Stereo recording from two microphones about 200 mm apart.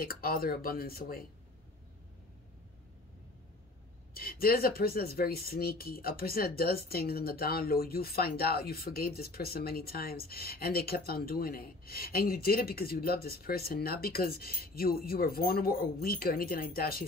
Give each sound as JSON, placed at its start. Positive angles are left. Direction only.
{"t": 0.0, "sound": "speech", "side_deg": 50}
{"t": 4.1, "sound": "speech", "side_deg": 50}